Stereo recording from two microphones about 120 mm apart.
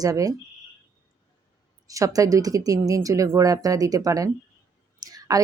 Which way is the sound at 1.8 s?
30° right (ahead or behind).